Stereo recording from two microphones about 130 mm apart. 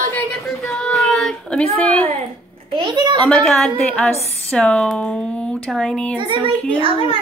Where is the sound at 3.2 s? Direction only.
5° left (ahead or behind).